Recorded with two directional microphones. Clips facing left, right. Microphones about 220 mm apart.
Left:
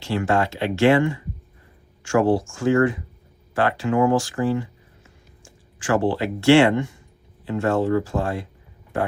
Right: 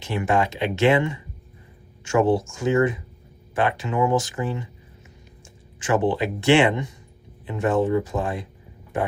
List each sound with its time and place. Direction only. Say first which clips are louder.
0.0 s speech: left 1 dB; 20° right (ahead or behind)